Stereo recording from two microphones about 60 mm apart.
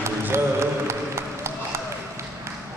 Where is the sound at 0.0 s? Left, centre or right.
Right.